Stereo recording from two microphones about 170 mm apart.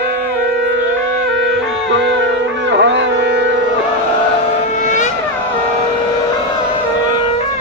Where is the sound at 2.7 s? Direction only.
90° right.